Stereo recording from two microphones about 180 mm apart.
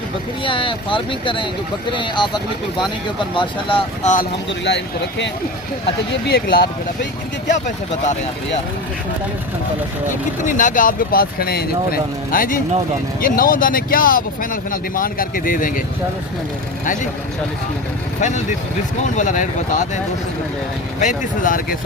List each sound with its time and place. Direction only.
0.4 s speech: 30° left (ahead or behind)
3.3 s speech: 30° left (ahead or behind)
4.0 s speech: 45° left (ahead or behind)
4.6 s speech: 75° left (ahead or behind)
6.2 s speech: 60° left (ahead or behind)
10.4 s speech: 45° left (ahead or behind)
16.8 s speech: 45° left (ahead or behind)
18.2 s speech: 40° left (ahead or behind)
21.0 s speech: 45° left (ahead or behind)